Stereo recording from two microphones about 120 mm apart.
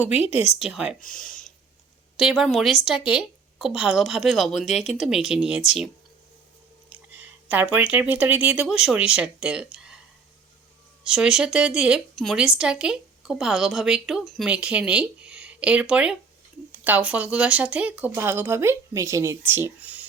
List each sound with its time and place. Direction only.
0.3 s speech: 55° left (ahead or behind)
0.6 s speech: 5° right (ahead or behind)
1.3 s a sound: 90° left
2.1 s speech: 5° right (ahead or behind)
6.9 s speech: 15° right (ahead or behind)
9.7 s a sound: 5° right (ahead or behind)
11.0 s speech: 5° right (ahead or behind)